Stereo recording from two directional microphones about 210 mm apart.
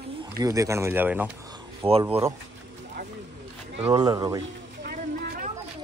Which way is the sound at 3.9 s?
20° right (ahead or behind).